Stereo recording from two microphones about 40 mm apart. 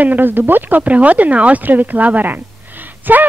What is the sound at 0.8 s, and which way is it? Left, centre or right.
A woman's voice, right.